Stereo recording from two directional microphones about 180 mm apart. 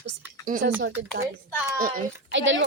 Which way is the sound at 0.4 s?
50° right (ahead or behind).